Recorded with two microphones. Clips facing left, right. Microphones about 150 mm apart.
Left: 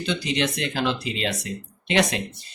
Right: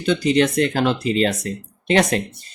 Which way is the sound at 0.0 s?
45° right (ahead or behind).